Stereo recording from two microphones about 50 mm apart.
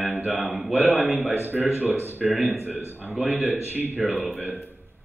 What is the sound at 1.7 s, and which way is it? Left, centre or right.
Speech, right.